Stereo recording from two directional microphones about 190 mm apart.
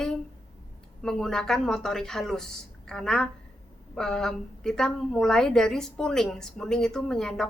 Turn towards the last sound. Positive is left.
turn(degrees=5)  # may be behind; listen again after turning